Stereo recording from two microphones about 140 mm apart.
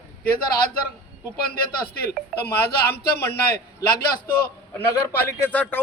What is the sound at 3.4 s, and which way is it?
Speech, 90° left.